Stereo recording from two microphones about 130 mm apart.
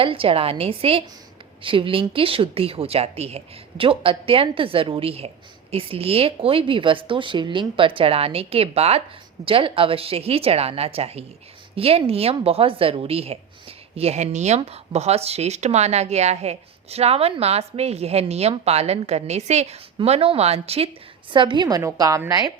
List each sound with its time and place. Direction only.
0.0 s a woman's voice: 45° right (ahead or behind)